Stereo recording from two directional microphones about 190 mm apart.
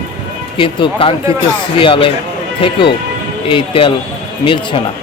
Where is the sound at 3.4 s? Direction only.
25° left (ahead or behind).